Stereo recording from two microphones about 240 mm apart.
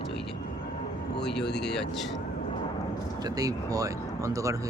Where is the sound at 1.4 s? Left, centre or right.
Left.